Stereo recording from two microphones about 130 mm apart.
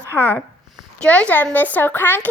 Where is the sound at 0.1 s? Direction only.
15° left (ahead or behind).